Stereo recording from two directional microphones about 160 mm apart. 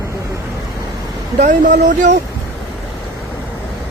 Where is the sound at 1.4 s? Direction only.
55° right (ahead or behind).